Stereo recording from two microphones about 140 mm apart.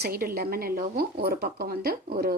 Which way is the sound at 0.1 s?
90° right.